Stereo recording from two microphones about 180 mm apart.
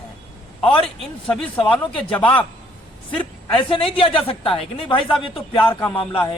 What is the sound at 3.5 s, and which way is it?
A man's voice, 30° left (ahead or behind).